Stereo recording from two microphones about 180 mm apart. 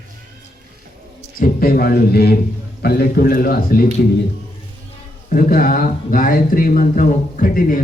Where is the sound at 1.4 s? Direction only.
55° left (ahead or behind).